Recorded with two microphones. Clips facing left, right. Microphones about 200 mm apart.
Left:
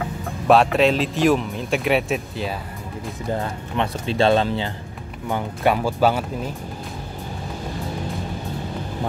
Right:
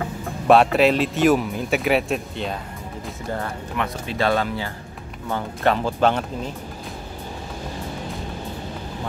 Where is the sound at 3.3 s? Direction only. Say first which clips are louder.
Left 1 dB; 30° left (ahead or behind).